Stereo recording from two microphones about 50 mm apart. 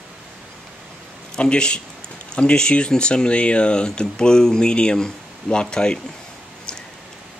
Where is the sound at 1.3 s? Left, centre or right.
Centre.